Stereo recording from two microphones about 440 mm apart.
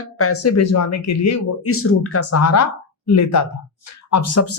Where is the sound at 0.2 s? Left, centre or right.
Left.